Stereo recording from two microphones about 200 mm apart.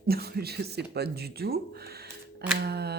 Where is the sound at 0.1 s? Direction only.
50° right (ahead or behind).